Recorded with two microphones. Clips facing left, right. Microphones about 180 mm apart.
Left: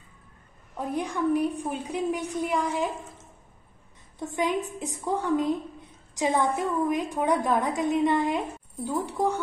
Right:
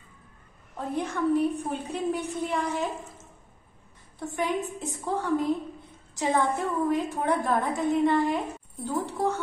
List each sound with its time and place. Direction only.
0.7 s a woman's voice: 15° left (ahead or behind)
4.4 s a woman's voice: 15° left (ahead or behind)